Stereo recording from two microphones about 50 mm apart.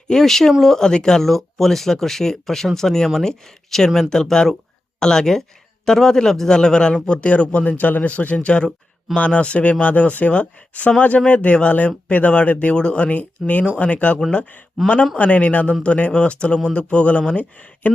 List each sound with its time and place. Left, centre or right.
0.1 s speech: centre; by 14.2 s left
14.8 s speech: centre
15.1 s speech: left